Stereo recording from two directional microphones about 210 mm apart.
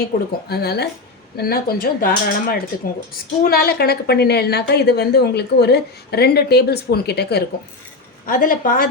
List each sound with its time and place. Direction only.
0.0 s a woman's voice: 50° left (ahead or behind)